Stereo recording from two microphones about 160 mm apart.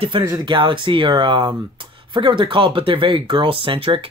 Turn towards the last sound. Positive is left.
turn(degrees=-35)  # may be behind; listen again after turning